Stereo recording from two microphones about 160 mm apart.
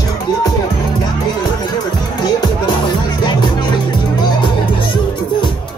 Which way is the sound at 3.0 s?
30° left (ahead or behind).